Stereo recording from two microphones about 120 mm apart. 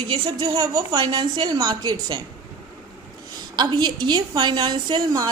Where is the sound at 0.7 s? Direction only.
35° right (ahead or behind).